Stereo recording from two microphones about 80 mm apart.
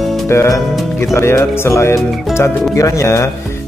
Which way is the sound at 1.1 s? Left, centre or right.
Left.